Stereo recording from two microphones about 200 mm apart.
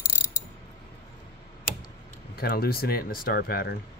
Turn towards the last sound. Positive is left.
turn(degrees=50)  # may be behind; listen again after turning